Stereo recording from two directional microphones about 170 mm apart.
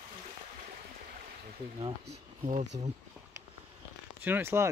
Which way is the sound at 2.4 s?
40° right (ahead or behind).